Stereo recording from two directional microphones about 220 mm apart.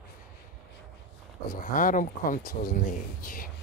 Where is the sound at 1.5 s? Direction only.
40° left (ahead or behind).